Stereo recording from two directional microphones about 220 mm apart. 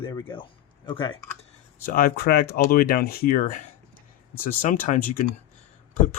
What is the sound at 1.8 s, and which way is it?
Speech, 40° left (ahead or behind).